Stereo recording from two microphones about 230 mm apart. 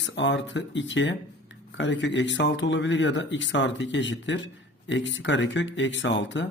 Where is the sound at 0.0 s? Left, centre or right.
Left.